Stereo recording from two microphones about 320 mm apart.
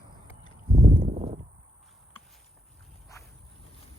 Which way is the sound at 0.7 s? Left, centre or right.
Right.